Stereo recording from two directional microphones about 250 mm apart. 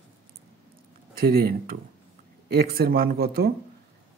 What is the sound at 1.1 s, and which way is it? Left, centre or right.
Speech, right.